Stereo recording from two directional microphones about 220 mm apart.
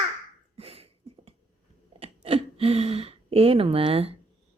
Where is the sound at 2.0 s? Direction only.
25° right (ahead or behind).